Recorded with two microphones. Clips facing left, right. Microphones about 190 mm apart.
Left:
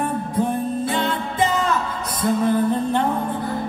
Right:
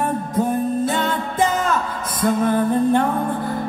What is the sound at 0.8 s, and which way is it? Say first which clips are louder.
Music: right 1 dB; 45° right (ahead or behind).